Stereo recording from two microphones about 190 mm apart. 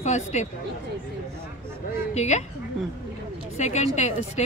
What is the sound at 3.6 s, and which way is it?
Speech, 40° left (ahead or behind).